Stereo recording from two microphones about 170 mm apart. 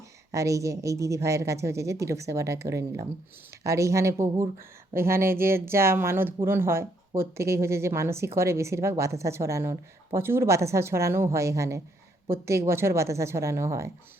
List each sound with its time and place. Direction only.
0.3 s speech: 20° right (ahead or behind)